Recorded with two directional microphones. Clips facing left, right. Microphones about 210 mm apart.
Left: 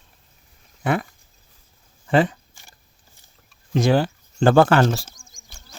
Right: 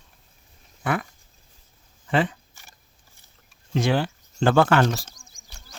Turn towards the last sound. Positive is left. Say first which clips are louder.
# left 3 dB
turn(degrees=35)  # may be behind; listen again after turning